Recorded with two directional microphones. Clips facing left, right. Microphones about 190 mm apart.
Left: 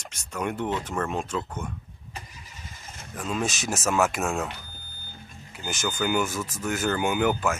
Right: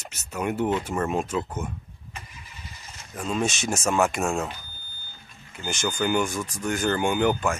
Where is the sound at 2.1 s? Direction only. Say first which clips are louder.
Left 1 dB; 35° left (ahead or behind).